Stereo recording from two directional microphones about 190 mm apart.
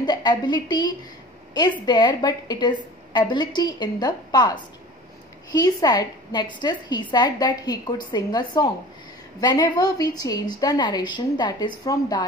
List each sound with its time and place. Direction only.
0.0 s a woman's voice: 20° left (ahead or behind)